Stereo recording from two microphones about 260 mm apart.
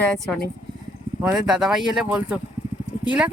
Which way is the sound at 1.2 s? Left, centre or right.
Centre.